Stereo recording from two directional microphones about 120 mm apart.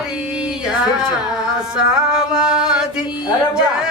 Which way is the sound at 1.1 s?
5° right (ahead or behind).